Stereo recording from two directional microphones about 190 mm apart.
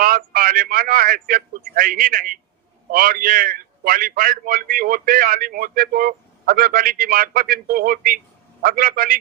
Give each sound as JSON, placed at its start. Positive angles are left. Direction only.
{"t": 0.0, "sound": "a man's voice", "side_deg": -50}